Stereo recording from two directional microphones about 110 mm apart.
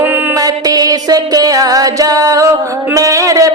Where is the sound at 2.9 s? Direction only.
30° right (ahead or behind).